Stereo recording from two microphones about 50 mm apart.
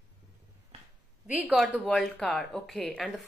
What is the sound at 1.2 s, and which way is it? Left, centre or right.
Speech, right.